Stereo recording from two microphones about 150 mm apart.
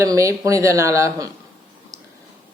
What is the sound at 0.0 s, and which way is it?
Speech, 20° right (ahead or behind).